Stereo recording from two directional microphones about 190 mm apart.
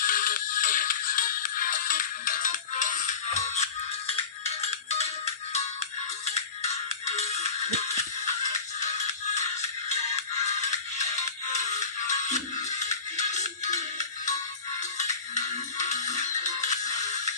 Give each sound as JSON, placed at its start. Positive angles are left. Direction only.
{"t": 0.0, "sound": "music", "side_deg": 45}
{"t": 9.3, "sound": "music", "side_deg": 35}
{"t": 11.5, "sound": "music", "side_deg": 40}
{"t": 15.4, "sound": "music", "side_deg": 40}